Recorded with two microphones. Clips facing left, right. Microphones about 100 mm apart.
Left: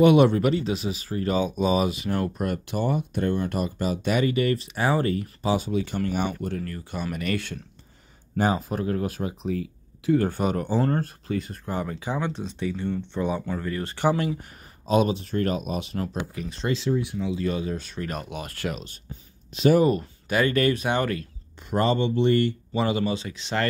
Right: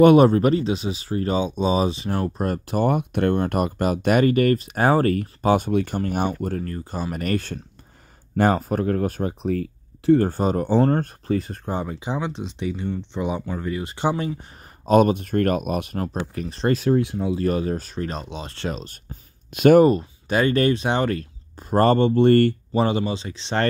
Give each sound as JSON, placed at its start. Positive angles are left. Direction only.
{"t": 0.0, "sound": "speech", "side_deg": -40}
{"t": 11.7, "sound": "speech", "side_deg": -20}
{"t": 14.9, "sound": "speech", "side_deg": -50}
{"t": 16.7, "sound": "speech", "side_deg": -55}
{"t": 19.5, "sound": "speech", "side_deg": -60}
{"t": 20.0, "sound": "speech", "side_deg": -30}
{"t": 21.8, "sound": "speech", "side_deg": -50}
{"t": 22.8, "sound": "speech", "side_deg": -30}